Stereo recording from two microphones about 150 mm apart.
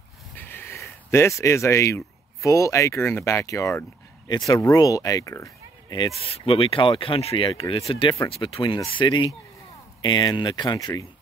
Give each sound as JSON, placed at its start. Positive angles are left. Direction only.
{"t": 0.4, "sound": "speech", "side_deg": 15}
{"t": 6.2, "sound": "speech", "side_deg": 40}